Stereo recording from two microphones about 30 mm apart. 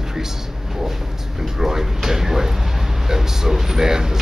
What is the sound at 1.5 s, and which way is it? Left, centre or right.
Speech, centre.